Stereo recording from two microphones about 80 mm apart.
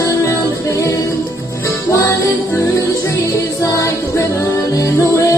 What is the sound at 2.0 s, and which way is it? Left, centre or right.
Music, left.